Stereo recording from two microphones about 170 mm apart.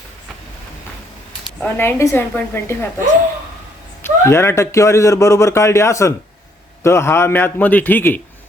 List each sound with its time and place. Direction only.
1.5 s speech: 10° left (ahead or behind)
4.0 s speech: 15° left (ahead or behind)